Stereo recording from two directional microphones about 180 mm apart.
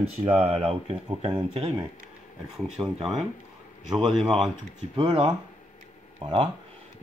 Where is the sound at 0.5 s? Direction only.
35° right (ahead or behind).